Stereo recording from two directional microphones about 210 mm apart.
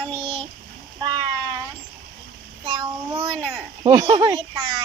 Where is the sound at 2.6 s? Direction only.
25° right (ahead or behind).